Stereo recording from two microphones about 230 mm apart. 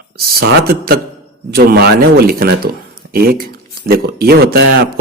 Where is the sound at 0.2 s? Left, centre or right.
Right.